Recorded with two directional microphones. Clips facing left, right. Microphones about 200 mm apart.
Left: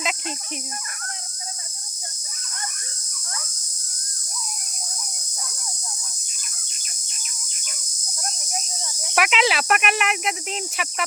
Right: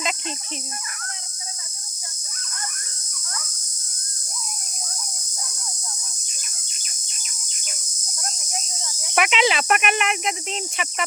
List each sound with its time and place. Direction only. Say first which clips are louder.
9.1 s speech: right 1 dB; centre (ahead or behind)